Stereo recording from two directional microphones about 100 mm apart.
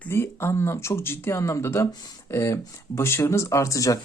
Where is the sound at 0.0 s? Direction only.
25° left (ahead or behind).